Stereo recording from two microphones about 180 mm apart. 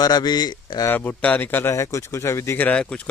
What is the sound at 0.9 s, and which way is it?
Speech, 10° left (ahead or behind).